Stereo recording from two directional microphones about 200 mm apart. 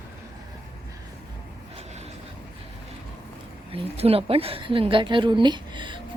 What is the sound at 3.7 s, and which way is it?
A woman's voice, 30° right (ahead or behind).